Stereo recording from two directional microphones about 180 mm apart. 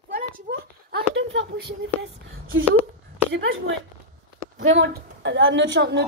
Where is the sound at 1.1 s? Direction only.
90° right.